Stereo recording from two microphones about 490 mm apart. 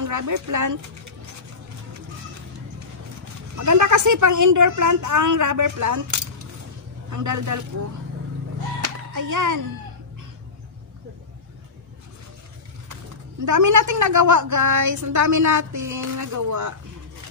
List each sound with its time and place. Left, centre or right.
0.0 s a woman's voice: right
3.5 s a woman's voice: right
8.8 s music: right
13.5 s a woman's voice: right